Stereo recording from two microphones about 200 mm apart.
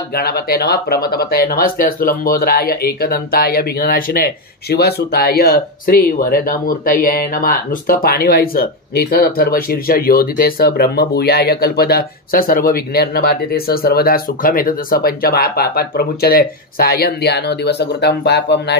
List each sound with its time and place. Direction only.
0.1 s speech: 50° left (ahead or behind)